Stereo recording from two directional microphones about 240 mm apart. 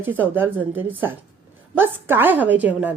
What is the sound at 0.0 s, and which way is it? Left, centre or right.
A woman's voice, centre.